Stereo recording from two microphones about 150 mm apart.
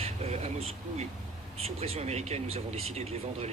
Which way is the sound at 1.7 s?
40° right (ahead or behind).